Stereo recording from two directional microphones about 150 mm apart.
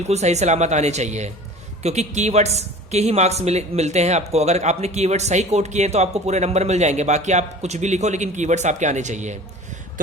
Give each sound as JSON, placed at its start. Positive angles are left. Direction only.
{"t": 0.1, "sound": "speech", "side_deg": -45}